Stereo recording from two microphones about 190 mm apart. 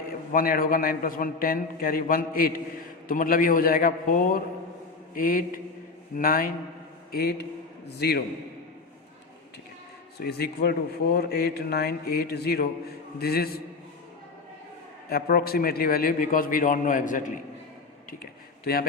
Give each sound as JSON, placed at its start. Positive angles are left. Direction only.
{"t": 0.3, "sound": "a man's voice", "side_deg": 50}
{"t": 10.2, "sound": "a man's voice", "side_deg": 55}
{"t": 15.1, "sound": "a man's voice", "side_deg": 50}
{"t": 18.6, "sound": "a man's voice", "side_deg": 50}